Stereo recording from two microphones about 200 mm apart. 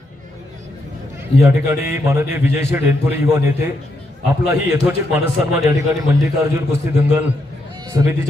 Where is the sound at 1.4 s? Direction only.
10° right (ahead or behind).